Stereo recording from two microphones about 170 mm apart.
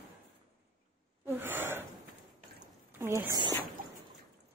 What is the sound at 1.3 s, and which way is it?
Gasp, 10° right (ahead or behind).